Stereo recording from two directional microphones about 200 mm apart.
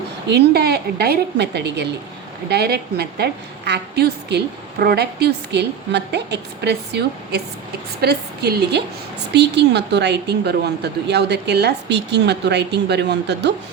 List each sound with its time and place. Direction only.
0.3 s a woman's voice: 55° right (ahead or behind)